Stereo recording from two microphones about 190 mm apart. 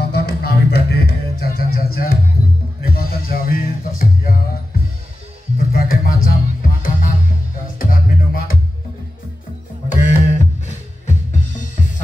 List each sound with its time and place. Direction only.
0.0 s music: 60° left (ahead or behind)
9.8 s music: 40° left (ahead or behind)
11.1 s drum: 40° left (ahead or behind)